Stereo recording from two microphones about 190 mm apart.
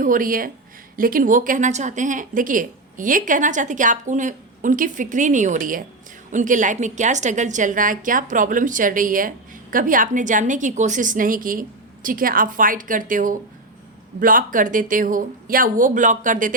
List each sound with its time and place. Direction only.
0.0 s a woman's voice: 45° right (ahead or behind)